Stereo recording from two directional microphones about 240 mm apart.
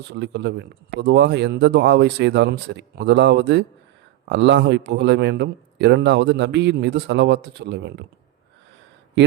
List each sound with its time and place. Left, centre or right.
0.1 s speech: right